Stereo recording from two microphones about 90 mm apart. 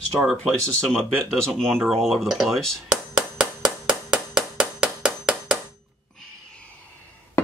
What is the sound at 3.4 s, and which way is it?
Clapping, 5° right (ahead or behind).